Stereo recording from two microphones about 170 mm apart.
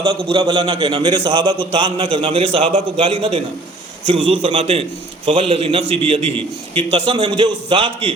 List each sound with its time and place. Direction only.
0.3 s a man's voice: 25° right (ahead or behind)